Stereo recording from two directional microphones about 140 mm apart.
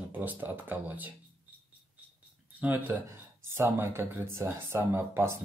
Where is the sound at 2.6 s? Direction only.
15° right (ahead or behind).